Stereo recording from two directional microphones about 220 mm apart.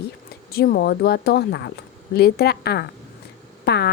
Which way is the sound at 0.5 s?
45° left (ahead or behind).